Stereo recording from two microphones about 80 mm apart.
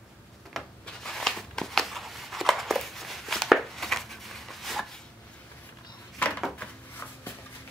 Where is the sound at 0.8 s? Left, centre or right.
Centre.